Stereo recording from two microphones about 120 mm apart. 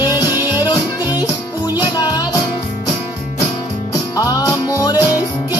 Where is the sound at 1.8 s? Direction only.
35° left (ahead or behind).